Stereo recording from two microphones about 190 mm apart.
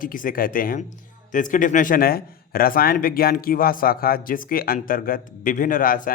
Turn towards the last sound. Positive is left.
turn(degrees=45)  # may be behind; listen again after turning